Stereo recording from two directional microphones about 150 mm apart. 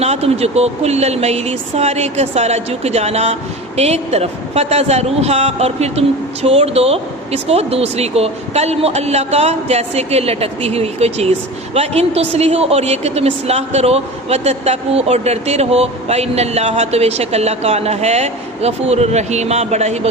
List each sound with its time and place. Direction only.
0.0 s a woman's voice: 45° right (ahead or behind)